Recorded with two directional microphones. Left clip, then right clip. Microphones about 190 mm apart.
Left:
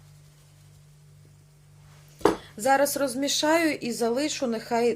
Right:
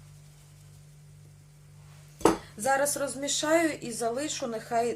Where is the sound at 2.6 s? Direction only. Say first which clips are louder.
Left 7 dB; 40° left (ahead or behind).